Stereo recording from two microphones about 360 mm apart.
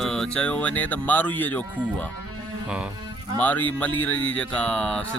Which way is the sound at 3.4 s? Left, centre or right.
Centre.